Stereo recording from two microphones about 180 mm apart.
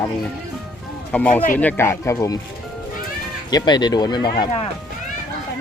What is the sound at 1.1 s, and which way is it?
Speech, 10° left (ahead or behind).